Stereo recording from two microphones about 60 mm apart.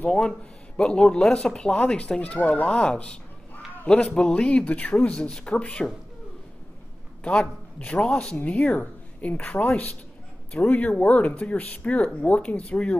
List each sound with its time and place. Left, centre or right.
0.0 s speech: centre
7.2 s speech: centre